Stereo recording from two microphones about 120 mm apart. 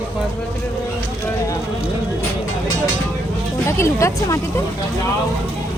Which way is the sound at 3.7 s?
25° left (ahead or behind).